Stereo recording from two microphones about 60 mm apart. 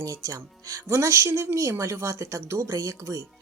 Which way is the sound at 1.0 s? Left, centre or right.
Right.